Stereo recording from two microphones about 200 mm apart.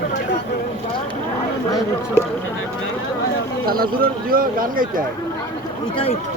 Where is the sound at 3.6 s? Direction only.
50° right (ahead or behind).